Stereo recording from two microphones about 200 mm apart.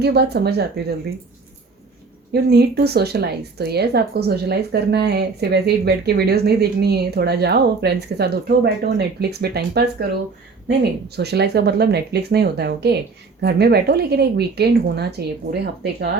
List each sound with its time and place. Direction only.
0.0 s speech: 55° right (ahead or behind)
2.3 s a woman's voice: 55° right (ahead or behind)